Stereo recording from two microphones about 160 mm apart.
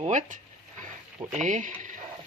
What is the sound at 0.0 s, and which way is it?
Speech, 50° right (ahead or behind).